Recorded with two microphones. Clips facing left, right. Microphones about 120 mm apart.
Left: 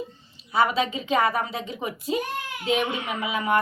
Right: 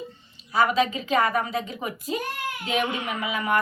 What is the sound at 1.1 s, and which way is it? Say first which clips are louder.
Speech: even; 30° left (ahead or behind).